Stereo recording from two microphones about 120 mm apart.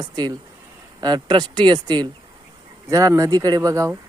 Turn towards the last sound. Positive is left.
turn(degrees=-30)  # may be behind; listen again after turning